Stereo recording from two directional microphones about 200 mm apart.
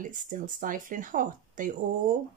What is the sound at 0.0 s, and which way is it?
Speech, 40° right (ahead or behind).